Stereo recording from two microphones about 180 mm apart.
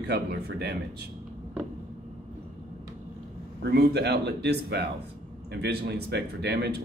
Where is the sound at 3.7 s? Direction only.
65° right (ahead or behind).